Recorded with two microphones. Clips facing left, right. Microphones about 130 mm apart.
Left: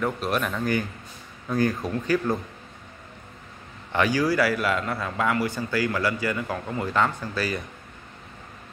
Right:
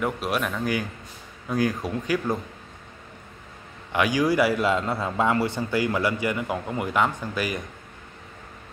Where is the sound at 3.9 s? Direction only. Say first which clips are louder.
Right 1 dB; 15° right (ahead or behind).